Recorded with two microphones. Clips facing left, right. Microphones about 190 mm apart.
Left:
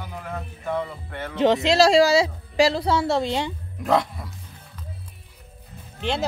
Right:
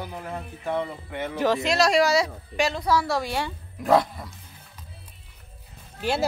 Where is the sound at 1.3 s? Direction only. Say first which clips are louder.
Left 5 dB; 20° left (ahead or behind).